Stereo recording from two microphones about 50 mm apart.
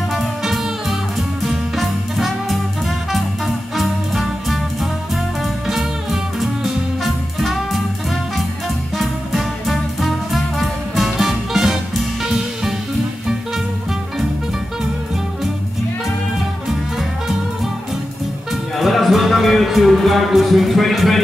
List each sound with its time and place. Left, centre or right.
0.1 s music: centre
1.4 s swing music: centre
3.1 s music: centre
6.4 s music: centre
8.9 s music: centre
18.8 s music: centre